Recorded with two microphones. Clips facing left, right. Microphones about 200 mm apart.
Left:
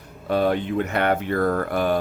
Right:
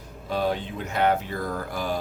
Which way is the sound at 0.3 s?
60° left (ahead or behind).